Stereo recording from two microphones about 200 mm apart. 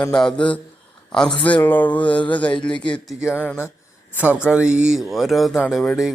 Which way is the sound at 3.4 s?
10° left (ahead or behind).